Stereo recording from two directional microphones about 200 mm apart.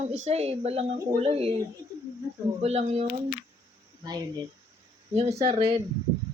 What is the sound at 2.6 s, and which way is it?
Speech, 30° right (ahead or behind).